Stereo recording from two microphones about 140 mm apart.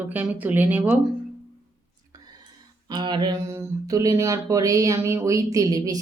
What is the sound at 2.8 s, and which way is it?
Speech, 30° right (ahead or behind).